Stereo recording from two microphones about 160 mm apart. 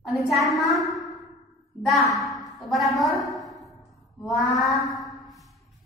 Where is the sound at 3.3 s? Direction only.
Centre (ahead or behind).